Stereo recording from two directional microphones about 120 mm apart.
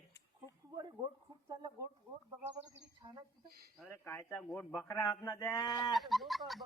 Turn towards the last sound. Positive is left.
turn(degrees=0)  # may be behind; listen again after turning